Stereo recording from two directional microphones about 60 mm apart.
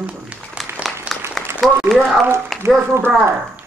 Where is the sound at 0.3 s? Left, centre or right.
Centre.